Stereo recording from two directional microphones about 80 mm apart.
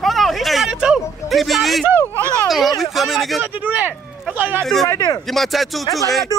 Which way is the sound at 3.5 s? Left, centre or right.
Right.